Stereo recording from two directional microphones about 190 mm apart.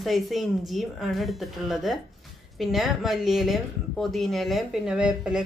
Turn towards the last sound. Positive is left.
turn(degrees=-5)  # may be behind; listen again after turning